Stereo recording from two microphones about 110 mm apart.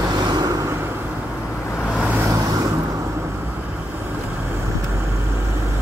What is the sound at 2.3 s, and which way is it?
Vehicle, 30° right (ahead or behind).